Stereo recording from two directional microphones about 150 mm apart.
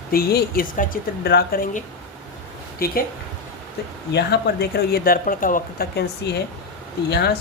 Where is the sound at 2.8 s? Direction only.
80° left.